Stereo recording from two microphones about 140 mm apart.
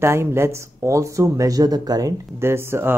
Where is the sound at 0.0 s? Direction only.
20° right (ahead or behind).